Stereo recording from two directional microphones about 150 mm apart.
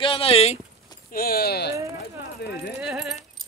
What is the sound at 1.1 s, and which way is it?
Speech, 85° left.